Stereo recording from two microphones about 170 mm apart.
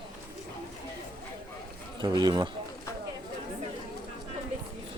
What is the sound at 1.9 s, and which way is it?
Speech, 25° right (ahead or behind).